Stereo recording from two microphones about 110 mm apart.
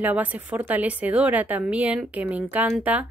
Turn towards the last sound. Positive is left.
turn(degrees=-15)  # may be behind; listen again after turning